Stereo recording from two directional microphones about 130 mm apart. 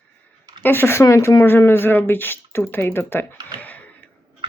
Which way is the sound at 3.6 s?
10° left (ahead or behind).